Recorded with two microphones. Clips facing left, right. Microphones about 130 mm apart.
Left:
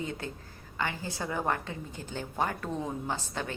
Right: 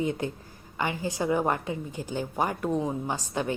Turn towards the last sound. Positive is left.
turn(degrees=-15)  # may be behind; listen again after turning